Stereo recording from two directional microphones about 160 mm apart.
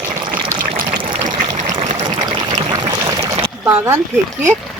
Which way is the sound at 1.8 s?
45° right (ahead or behind).